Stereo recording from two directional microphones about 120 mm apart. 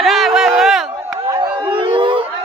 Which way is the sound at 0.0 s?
Centre (ahead or behind).